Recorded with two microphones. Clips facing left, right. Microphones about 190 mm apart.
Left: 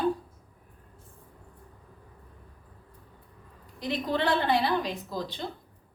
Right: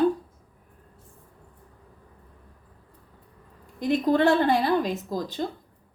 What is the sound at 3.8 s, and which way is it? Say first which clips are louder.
A woman's voice: right 8 dB; 50° right (ahead or behind).